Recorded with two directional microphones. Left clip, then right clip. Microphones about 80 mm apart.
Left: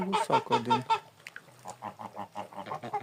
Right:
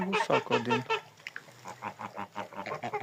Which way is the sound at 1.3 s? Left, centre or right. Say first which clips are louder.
Right 3 dB; right.